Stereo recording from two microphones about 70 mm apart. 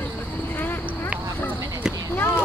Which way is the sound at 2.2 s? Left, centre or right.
Left.